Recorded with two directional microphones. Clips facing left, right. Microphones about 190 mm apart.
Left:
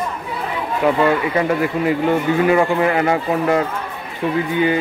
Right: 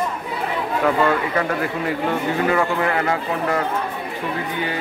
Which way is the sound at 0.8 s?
15° left (ahead or behind).